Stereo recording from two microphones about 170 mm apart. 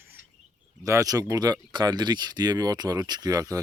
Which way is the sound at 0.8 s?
20° right (ahead or behind).